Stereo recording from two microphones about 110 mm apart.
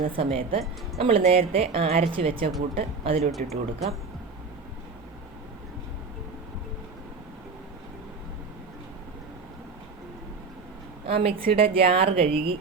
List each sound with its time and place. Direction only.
0.1 s a woman's voice: 55° right (ahead or behind)
3.4 s speech: 75° right (ahead or behind)
11.0 s a woman's voice: 60° right (ahead or behind)